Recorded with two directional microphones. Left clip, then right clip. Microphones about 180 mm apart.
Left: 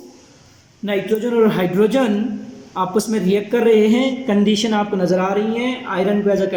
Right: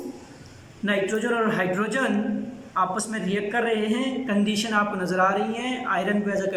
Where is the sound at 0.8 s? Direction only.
55° left (ahead or behind).